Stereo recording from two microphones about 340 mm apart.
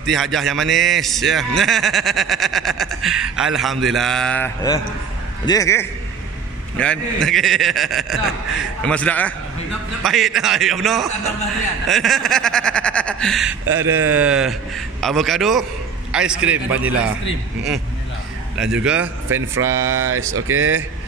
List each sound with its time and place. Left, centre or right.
0.0 s a man's voice: centre
18.6 s a man's voice: centre
20.3 s speech: right